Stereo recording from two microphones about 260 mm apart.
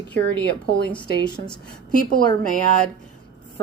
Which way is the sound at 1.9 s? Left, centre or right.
Left.